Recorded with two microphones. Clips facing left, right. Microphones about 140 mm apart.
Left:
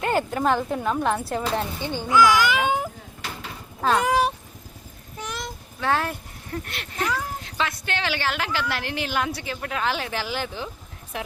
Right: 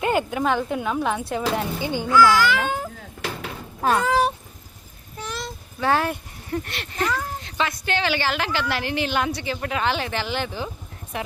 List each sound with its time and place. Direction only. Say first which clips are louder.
0.0 s speech: right 1 dB; 5° right (ahead or behind)
2.0 s speech: right 1 dB; 15° left (ahead or behind)
3.9 s speech: even; 15° left (ahead or behind)
5.2 s child singing: right 1 dB; 15° left (ahead or behind)
5.8 s speech: right 3 dB; centre (ahead or behind)